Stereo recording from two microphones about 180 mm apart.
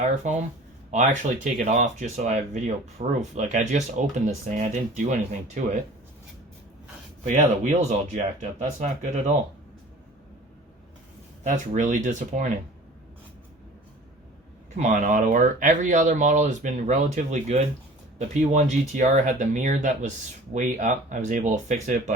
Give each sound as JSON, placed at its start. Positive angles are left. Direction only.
{"t": 0.0, "sound": "speech", "side_deg": -40}
{"t": 7.3, "sound": "speech", "side_deg": -45}
{"t": 11.4, "sound": "speech", "side_deg": -45}
{"t": 14.8, "sound": "speech", "side_deg": -45}